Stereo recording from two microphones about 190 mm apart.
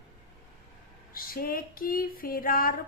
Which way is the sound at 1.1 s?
50° left (ahead or behind).